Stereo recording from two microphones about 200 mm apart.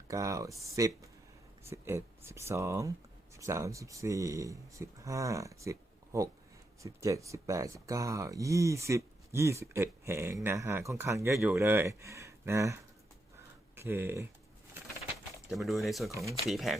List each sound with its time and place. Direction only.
0.1 s speech: 15° right (ahead or behind)
15.4 s speech: centre (ahead or behind)